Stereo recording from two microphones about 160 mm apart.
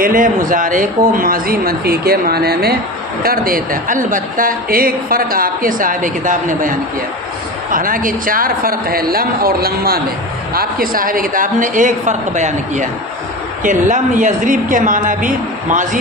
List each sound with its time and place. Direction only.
0.0 s a woman's voice: 60° right (ahead or behind); by 2.7 s 75° right (ahead or behind)
3.2 s a woman's voice: 65° right (ahead or behind)